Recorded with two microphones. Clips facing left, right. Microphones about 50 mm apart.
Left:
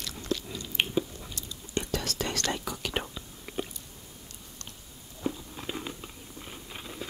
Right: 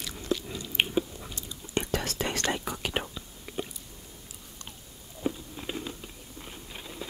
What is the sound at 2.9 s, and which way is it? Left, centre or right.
Whispering, centre.